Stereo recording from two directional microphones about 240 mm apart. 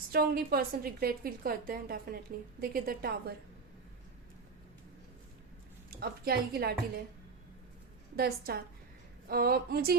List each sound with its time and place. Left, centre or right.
0.1 s a woman's voice: right
5.9 s a woman's voice: right
8.1 s a woman's voice: right